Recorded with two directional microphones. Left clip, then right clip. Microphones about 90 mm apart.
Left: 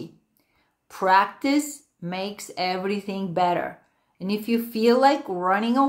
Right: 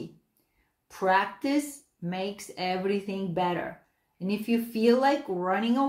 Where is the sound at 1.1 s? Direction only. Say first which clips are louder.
Left 6 dB; 35° left (ahead or behind).